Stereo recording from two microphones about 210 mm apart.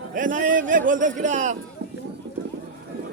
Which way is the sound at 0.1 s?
40° right (ahead or behind).